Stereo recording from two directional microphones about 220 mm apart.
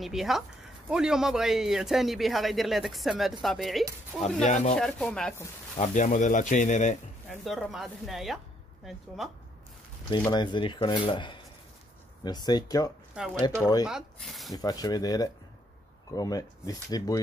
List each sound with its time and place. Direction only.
0.0 s a man's voice: centre (ahead or behind)
4.5 s speech: 30° left (ahead or behind)
4.7 s a man's voice: 5° left (ahead or behind)
5.8 s speech: 35° left (ahead or behind)
7.2 s a man's voice: centre (ahead or behind)
10.2 s speech: 20° left (ahead or behind)
13.1 s speech: 5° right (ahead or behind)
14.5 s speech: 15° left (ahead or behind)